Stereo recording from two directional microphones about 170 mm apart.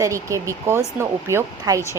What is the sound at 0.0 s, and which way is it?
A woman's voice, 15° right (ahead or behind).